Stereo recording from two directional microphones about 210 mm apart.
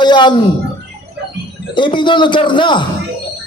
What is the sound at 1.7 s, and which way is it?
A man's voice, 20° left (ahead or behind).